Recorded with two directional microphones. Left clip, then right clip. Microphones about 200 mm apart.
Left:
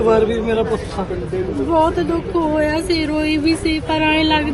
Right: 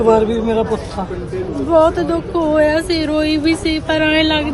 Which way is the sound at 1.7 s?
15° right (ahead or behind).